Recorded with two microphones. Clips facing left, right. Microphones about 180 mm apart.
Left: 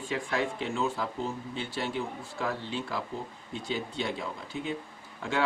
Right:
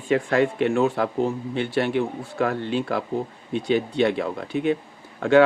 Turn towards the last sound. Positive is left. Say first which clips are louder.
# right 15 dB
turn(degrees=-65)  # may be behind; listen again after turning